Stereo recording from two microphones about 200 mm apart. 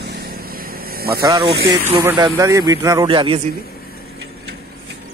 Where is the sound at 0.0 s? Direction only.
55° right (ahead or behind).